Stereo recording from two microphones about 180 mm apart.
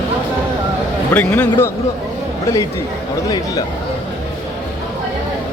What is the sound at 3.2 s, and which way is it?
Speech, 20° left (ahead or behind).